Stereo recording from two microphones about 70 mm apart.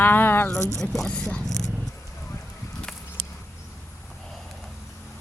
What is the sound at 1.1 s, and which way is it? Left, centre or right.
Speech, centre.